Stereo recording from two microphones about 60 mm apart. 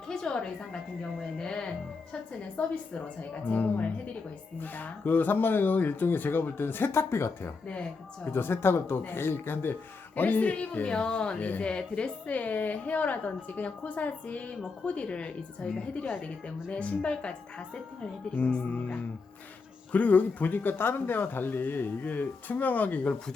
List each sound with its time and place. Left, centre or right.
0.1 s a woman's voice: centre
2.6 s speech: left